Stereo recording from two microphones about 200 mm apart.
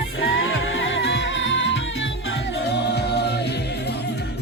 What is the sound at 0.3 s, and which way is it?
Music, 70° left (ahead or behind).